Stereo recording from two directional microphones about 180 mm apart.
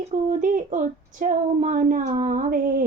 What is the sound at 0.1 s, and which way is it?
Speech, 45° right (ahead or behind).